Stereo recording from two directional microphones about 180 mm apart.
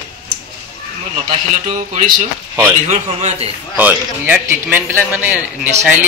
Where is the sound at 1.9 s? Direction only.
45° right (ahead or behind).